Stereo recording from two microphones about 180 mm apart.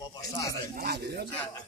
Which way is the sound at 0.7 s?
60° right (ahead or behind).